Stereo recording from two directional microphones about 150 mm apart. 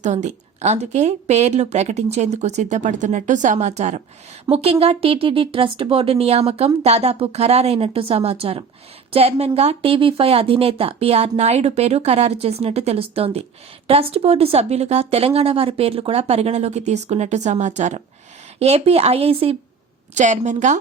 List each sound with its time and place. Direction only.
0.0 s a woman's voice: 50° right (ahead or behind)
20.1 s speech: 55° right (ahead or behind)